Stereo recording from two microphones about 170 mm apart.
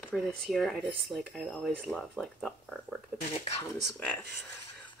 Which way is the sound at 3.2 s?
40° left (ahead or behind).